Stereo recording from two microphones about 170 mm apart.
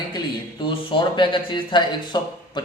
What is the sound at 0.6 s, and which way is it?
A man's voice, 30° left (ahead or behind).